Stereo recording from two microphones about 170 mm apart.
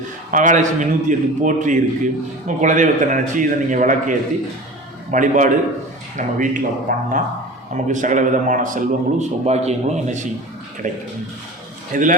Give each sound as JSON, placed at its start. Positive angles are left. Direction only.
{"t": 0.3, "sound": "a man's voice", "side_deg": -50}